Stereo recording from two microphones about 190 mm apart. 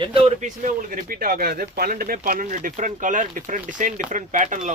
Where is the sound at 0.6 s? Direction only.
45° right (ahead or behind).